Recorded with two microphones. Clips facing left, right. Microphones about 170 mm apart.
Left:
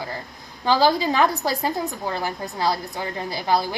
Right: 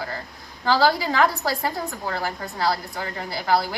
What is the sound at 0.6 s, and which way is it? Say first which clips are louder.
A woman's voice: left 1 dB; 20° left (ahead or behind).